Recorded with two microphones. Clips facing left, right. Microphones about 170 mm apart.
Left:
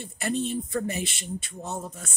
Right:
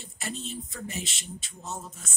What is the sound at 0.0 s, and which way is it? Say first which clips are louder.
Speech: left 9 dB; 60° left (ahead or behind).